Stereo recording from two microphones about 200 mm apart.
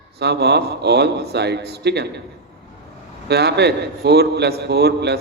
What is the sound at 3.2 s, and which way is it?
A man's voice, 55° right (ahead or behind).